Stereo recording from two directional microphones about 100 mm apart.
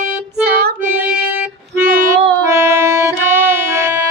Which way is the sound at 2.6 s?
25° right (ahead or behind).